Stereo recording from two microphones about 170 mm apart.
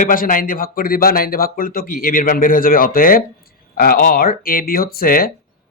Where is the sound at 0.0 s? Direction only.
55° left (ahead or behind).